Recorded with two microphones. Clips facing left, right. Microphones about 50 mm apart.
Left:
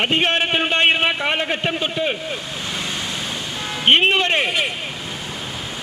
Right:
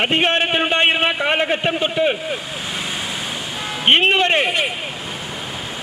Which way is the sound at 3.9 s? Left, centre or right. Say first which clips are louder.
Right 1 dB; centre.